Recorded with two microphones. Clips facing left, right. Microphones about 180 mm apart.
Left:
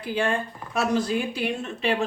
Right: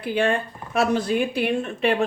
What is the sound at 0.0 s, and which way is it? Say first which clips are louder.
Speech: right 3 dB; 60° right (ahead or behind).